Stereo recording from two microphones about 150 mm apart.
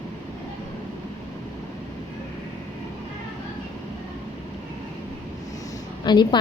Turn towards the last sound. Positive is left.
turn(degrees=30)  # may be behind; listen again after turning